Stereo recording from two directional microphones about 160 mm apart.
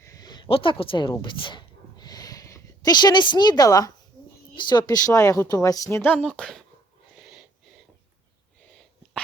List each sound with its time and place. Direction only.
0.0 s a sound: 20° left (ahead or behind)
4.5 s a woman's voice: 30° left (ahead or behind)
6.2 s speech: 5° left (ahead or behind)